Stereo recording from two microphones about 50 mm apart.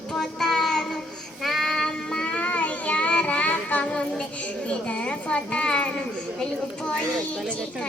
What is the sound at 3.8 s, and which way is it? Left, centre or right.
A woman's voice, left.